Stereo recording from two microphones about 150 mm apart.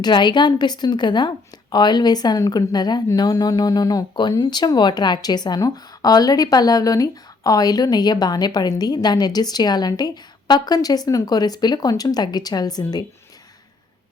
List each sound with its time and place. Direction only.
0.0 s a woman's voice: 30° left (ahead or behind)